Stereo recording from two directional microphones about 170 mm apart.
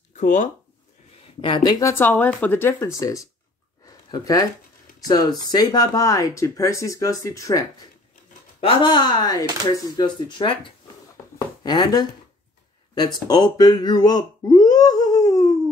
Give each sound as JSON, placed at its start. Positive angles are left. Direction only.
{"t": 0.1, "sound": "speech", "side_deg": 45}
{"t": 1.4, "sound": "speech", "side_deg": 30}
{"t": 3.8, "sound": "a sound", "side_deg": 20}
{"t": 5.0, "sound": "speech", "side_deg": 25}
{"t": 8.5, "sound": "speech", "side_deg": 30}